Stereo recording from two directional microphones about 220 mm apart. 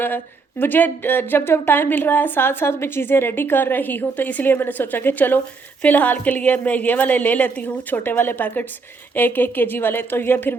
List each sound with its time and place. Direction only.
0.6 s a woman's voice: 10° left (ahead or behind)